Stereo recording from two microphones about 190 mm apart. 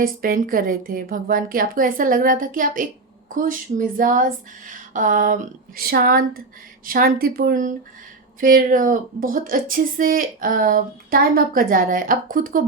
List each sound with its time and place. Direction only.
0.0 s speech: 50° right (ahead or behind)